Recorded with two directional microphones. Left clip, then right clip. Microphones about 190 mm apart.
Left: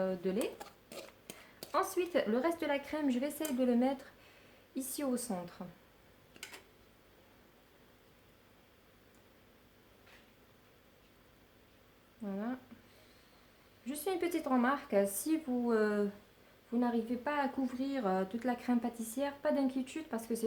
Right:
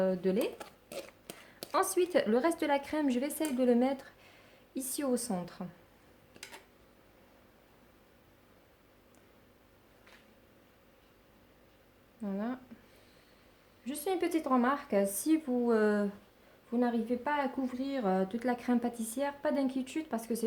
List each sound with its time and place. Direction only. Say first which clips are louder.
0.0 s speech: right 5 dB; 35° right (ahead or behind)
0.6 s a sound: right 4 dB; 5° right (ahead or behind)
1.3 s a woman's voice: right 2 dB; 45° right (ahead or behind)
12.2 s a woman's voice: right 3 dB; 40° right (ahead or behind)
13.8 s a woman's voice: right 3 dB; 30° right (ahead or behind)